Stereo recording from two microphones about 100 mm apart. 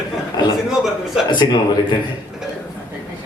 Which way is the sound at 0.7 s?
5° right (ahead or behind).